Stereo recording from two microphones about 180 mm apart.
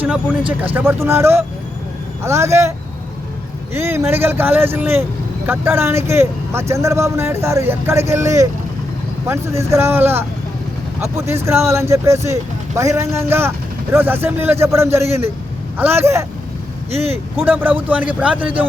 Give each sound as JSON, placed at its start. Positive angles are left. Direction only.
{"t": 0.0, "sound": "speech", "side_deg": -10}
{"t": 3.8, "sound": "speech", "side_deg": -15}
{"t": 11.4, "sound": "speech", "side_deg": -15}
{"t": 16.9, "sound": "speech", "side_deg": -35}
{"t": 17.4, "sound": "speech", "side_deg": -10}